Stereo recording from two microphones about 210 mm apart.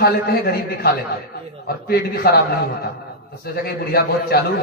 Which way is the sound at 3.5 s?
50° left (ahead or behind).